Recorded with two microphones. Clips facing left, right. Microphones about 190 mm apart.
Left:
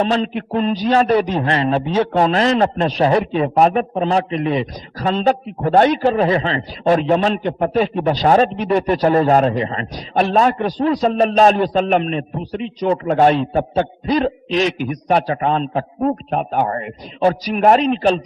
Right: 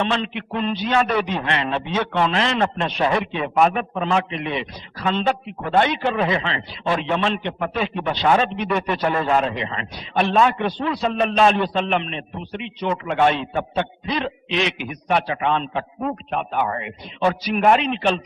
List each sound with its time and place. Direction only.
0.0 s a man's voice: 40° left (ahead or behind)